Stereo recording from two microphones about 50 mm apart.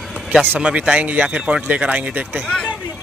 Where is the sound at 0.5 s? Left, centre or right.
Right.